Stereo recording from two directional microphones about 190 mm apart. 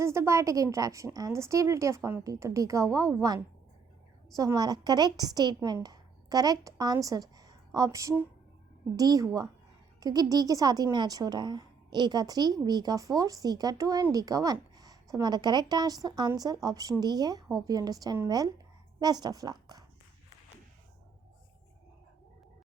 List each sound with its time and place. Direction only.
0.0 s a woman's voice: 15° right (ahead or behind)